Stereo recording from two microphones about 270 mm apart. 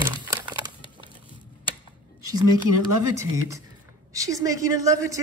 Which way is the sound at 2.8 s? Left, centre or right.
Centre.